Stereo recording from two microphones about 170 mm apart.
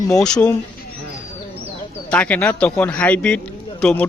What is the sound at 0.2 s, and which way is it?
Speech, 5° left (ahead or behind).